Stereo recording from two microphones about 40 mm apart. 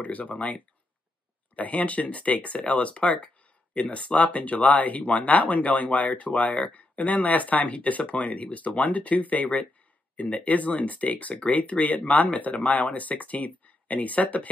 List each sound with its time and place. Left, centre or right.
0.0 s speech: left
1.6 s speech: left